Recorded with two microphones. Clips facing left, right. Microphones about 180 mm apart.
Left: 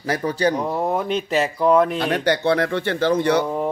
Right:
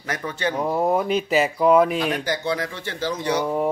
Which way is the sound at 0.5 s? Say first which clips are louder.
Right 1 dB; 5° right (ahead or behind).